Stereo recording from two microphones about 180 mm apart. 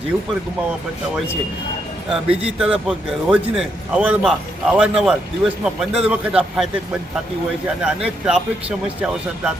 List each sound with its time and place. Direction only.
2.0 s a man's voice: 5° right (ahead or behind)
7.8 s a man's voice: 5° right (ahead or behind)